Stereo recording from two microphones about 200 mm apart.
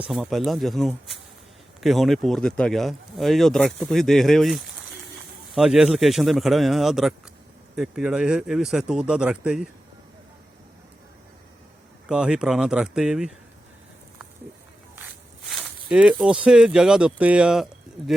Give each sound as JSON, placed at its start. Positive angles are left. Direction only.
{"t": 0.0, "sound": "speech", "side_deg": 0}
{"t": 12.0, "sound": "speech", "side_deg": -5}
{"t": 15.4, "sound": "speech", "side_deg": -5}